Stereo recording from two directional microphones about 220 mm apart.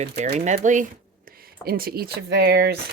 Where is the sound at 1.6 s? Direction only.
45° right (ahead or behind).